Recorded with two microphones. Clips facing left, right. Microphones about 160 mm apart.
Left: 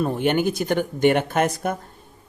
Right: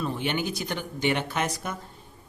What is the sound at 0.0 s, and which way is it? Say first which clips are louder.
Speech: left 8 dB; 50° left (ahead or behind).